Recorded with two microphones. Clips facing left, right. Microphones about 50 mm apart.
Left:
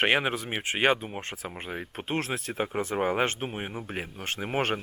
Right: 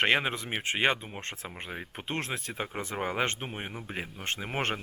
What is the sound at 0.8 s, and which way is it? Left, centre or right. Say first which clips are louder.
Speech: left 4 dB; centre.